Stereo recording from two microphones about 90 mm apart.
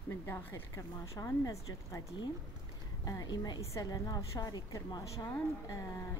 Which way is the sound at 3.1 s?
45° left (ahead or behind).